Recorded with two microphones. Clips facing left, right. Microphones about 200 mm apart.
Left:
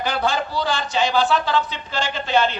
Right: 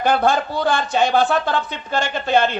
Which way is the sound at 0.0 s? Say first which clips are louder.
Right 5 dB; 55° right (ahead or behind).